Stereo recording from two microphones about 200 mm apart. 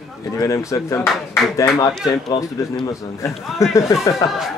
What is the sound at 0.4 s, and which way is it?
Speech, 15° left (ahead or behind).